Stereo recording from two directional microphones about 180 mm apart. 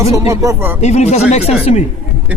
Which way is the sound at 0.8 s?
40° left (ahead or behind).